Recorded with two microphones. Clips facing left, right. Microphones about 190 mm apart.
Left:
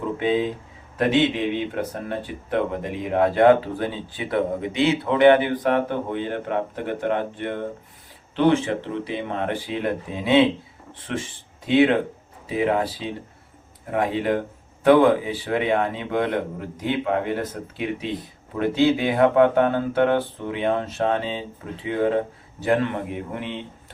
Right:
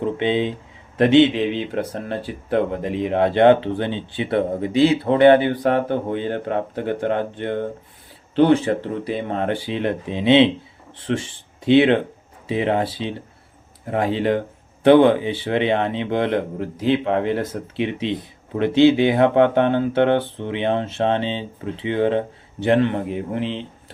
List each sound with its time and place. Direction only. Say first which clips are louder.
0.2 s speech: right 1 dB; 25° right (ahead or behind)
11.6 s speech: right 3 dB; 30° right (ahead or behind)